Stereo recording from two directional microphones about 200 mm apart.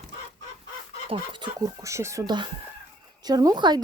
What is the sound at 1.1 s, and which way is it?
Speech, 25° right (ahead or behind).